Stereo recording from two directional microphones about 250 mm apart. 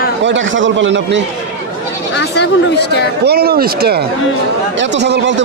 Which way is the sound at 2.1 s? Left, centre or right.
Left.